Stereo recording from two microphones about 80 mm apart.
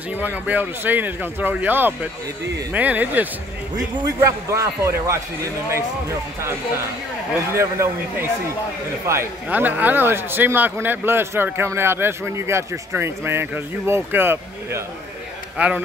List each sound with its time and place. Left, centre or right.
0.2 s a man's voice: right
4.2 s a man's voice: right
7.5 s a man's voice: right
9.5 s a man's voice: right
15.5 s a man's voice: centre